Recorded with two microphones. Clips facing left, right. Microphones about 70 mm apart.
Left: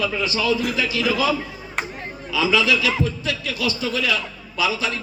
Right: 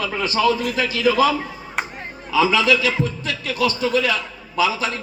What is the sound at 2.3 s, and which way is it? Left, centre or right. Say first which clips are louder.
A man's voice: right 3 dB; right.